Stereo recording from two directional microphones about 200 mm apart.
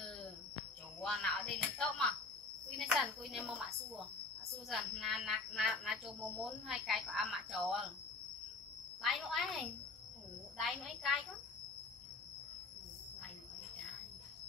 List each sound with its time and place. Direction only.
1.0 s speech: centre (ahead or behind)
9.0 s speech: centre (ahead or behind)